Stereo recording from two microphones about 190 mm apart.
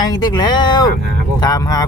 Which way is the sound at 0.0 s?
20° left (ahead or behind).